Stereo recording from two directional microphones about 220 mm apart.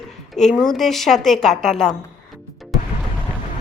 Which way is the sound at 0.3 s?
Centre (ahead or behind).